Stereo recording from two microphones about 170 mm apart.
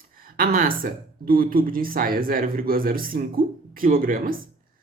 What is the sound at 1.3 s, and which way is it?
A woman's voice, 55° right (ahead or behind).